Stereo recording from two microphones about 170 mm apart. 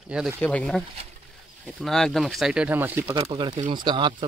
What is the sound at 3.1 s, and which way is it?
Speech, 30° right (ahead or behind).